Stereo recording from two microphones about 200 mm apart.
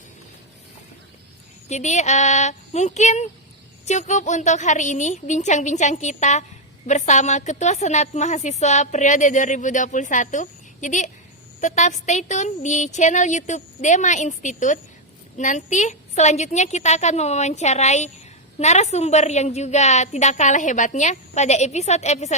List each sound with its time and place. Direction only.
1.6 s a woman's voice: 35° left (ahead or behind)